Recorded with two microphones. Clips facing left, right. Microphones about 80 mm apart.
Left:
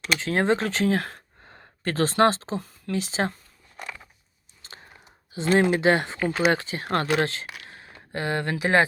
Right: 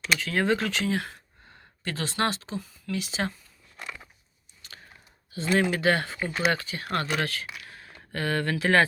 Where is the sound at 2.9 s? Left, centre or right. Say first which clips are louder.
Left 4 dB; left.